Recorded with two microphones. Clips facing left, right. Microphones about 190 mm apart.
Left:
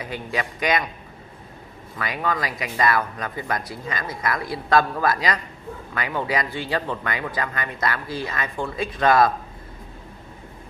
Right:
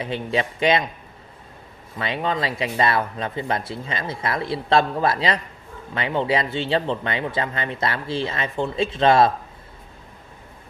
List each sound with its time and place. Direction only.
0.0 s speech: 25° right (ahead or behind)
2.0 s speech: 25° right (ahead or behind)